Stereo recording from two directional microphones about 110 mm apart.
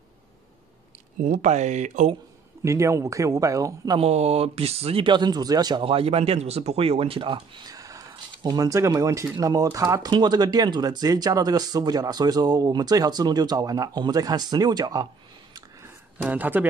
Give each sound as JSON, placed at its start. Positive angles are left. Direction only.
{"t": 1.5, "sound": "speech", "side_deg": -90}
{"t": 2.6, "sound": "speech", "side_deg": -25}
{"t": 4.0, "sound": "speech", "side_deg": -75}
{"t": 5.0, "sound": "speech", "side_deg": -40}
{"t": 5.8, "sound": "speech", "side_deg": -55}
{"t": 16.2, "sound": "speech", "side_deg": -15}